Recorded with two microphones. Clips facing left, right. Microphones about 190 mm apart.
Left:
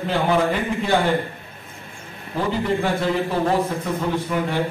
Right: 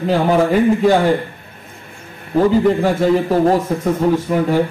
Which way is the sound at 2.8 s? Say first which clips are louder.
Right 7 dB; 40° right (ahead or behind).